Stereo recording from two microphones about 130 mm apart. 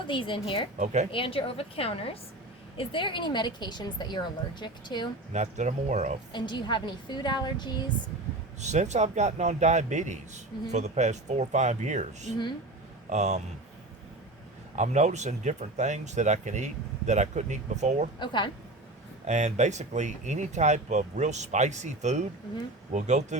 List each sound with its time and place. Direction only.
0.1 s a woman's voice: 40° left (ahead or behind)
5.3 s speech: 65° right (ahead or behind)
6.3 s a woman's voice: 35° left (ahead or behind)
8.6 s speech: 60° right (ahead or behind)
14.8 s speech: 60° right (ahead or behind)
18.2 s a woman's voice: 35° left (ahead or behind)
19.2 s speech: 60° right (ahead or behind)